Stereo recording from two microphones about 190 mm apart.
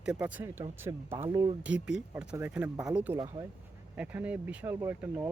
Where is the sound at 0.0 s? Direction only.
5° right (ahead or behind).